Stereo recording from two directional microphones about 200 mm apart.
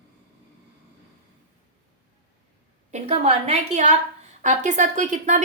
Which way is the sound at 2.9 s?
35° right (ahead or behind).